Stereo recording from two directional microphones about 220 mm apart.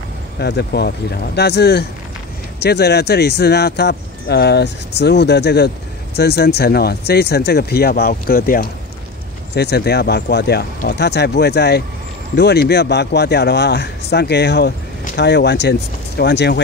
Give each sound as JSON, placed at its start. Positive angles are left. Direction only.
{"t": 0.4, "sound": "speech", "side_deg": 50}